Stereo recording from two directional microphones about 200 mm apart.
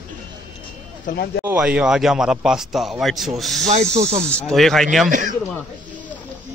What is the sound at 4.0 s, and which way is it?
Speech, 30° right (ahead or behind).